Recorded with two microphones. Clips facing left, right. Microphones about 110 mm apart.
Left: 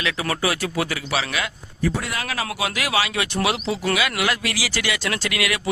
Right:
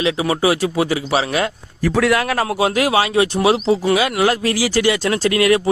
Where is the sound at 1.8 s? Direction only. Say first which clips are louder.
Right 9 dB; 75° right (ahead or behind); by 2.5 s 55° right (ahead or behind).